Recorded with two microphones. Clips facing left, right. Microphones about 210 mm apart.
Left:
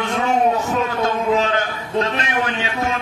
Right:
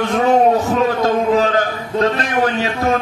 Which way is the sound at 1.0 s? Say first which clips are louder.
Right 4 dB; 35° right (ahead or behind).